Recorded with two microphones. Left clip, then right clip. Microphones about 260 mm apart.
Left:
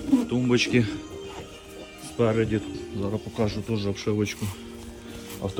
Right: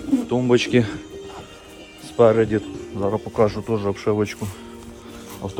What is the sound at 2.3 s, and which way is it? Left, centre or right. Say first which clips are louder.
Speech: right 6 dB; centre.